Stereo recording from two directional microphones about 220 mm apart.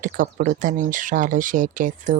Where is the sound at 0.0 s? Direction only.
40° right (ahead or behind).